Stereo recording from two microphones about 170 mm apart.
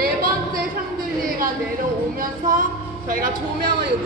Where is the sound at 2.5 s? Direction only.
55° right (ahead or behind).